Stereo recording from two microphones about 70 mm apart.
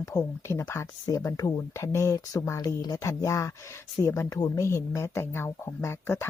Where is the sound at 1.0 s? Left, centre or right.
Left.